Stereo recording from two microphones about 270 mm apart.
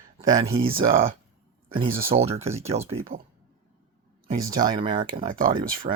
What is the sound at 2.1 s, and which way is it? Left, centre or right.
Speech, right.